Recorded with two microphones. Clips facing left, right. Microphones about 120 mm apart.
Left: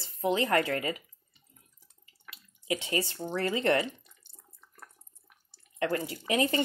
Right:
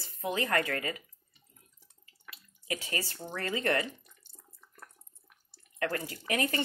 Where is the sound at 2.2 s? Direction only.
25° left (ahead or behind).